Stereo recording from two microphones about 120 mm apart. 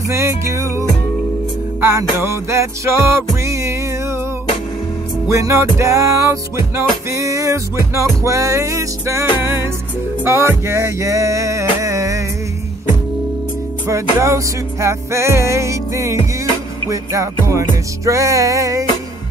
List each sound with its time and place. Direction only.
0.1 s music: 25° right (ahead or behind)
5.3 s music: 25° right (ahead or behind)
13.8 s music: 25° right (ahead or behind)